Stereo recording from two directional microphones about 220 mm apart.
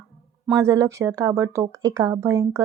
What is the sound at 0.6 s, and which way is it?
A woman's voice, 15° right (ahead or behind).